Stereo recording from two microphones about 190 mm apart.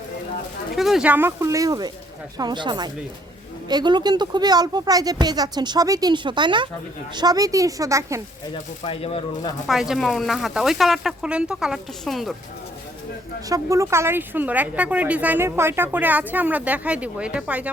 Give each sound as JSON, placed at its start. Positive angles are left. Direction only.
{"t": 0.8, "sound": "speech", "side_deg": 0}
{"t": 8.8, "sound": "speech", "side_deg": 30}
{"t": 9.6, "sound": "speech", "side_deg": 0}
{"t": 13.5, "sound": "speech", "side_deg": -15}